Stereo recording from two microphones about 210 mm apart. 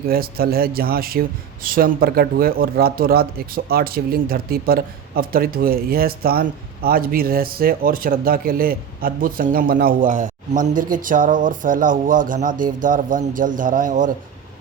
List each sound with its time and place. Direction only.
0.1 s speech: 45° right (ahead or behind)